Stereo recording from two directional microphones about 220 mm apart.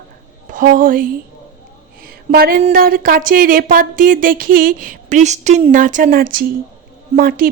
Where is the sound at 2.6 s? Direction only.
40° right (ahead or behind).